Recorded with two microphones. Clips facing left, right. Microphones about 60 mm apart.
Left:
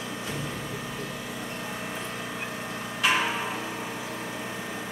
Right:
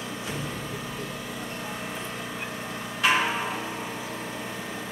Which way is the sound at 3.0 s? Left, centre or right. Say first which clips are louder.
Right 2 dB; right.